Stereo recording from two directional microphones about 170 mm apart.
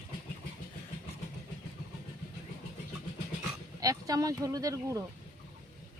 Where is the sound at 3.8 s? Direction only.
20° right (ahead or behind).